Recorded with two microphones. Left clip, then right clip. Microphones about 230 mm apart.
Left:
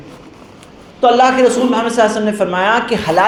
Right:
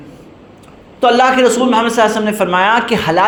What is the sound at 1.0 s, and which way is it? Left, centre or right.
A man's voice, right.